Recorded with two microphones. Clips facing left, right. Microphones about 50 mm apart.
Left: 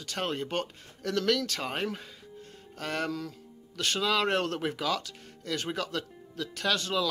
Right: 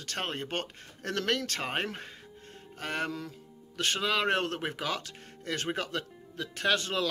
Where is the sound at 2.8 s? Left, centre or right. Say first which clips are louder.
Left 1 dB; right.